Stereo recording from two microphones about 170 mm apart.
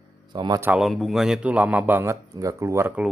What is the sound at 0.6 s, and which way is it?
A man's voice, 5° right (ahead or behind).